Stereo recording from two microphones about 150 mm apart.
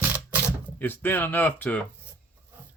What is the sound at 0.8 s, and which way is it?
Speech, 15° left (ahead or behind).